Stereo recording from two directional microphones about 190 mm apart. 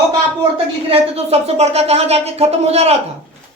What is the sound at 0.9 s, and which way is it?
Speech, 30° right (ahead or behind).